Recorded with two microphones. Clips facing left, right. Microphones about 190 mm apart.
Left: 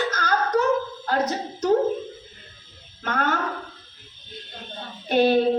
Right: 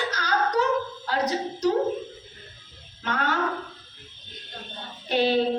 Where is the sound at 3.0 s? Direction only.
50° left (ahead or behind).